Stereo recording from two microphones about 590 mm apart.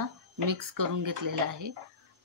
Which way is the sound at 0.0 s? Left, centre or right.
Right.